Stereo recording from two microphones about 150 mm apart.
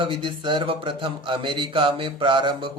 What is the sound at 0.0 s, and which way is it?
Speech, 35° right (ahead or behind).